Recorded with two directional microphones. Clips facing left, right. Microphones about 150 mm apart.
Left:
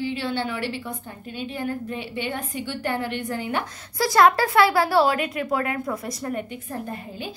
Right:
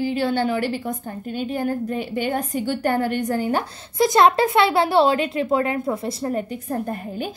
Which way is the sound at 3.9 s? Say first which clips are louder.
Right 2 dB; 20° right (ahead or behind).